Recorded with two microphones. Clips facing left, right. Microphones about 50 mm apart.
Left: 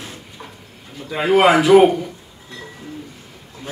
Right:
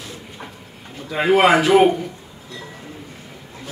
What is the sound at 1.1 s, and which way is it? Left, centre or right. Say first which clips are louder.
Speech: left 1 dB; centre.